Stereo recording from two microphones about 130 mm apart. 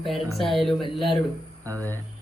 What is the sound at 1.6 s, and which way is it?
Speech, 25° right (ahead or behind).